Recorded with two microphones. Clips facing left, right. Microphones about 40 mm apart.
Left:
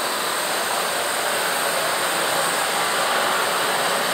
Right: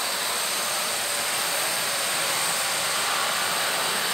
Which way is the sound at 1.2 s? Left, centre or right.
Left.